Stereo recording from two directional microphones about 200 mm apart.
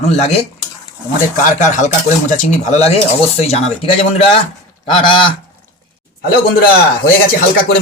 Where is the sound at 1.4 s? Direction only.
40° left (ahead or behind).